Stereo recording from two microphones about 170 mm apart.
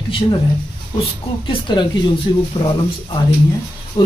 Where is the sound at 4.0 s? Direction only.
25° left (ahead or behind).